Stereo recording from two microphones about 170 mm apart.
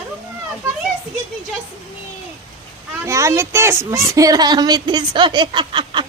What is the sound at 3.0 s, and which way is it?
Speech, 15° right (ahead or behind).